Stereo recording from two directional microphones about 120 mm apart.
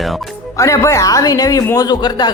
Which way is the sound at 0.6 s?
25° left (ahead or behind).